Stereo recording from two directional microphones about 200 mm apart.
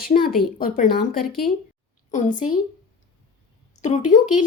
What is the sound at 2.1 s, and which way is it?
Speech, 40° left (ahead or behind).